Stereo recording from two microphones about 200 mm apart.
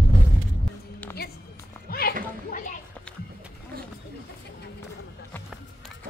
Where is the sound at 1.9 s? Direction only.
50° left (ahead or behind).